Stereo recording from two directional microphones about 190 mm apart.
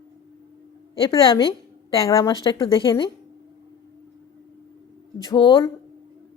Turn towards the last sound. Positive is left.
turn(degrees=25)  # may be behind; listen again after turning